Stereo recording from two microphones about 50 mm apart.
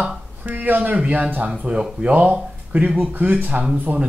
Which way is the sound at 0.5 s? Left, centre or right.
Right.